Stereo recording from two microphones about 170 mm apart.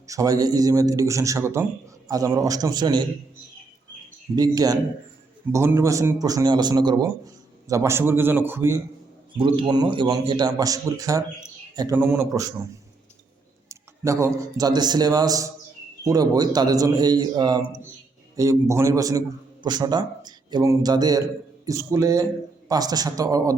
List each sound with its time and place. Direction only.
0.1 s a man's voice: 20° right (ahead or behind)
4.4 s a man's voice: 20° right (ahead or behind)
9.4 s a man's voice: 25° right (ahead or behind)
13.7 s a man's voice: 15° right (ahead or behind)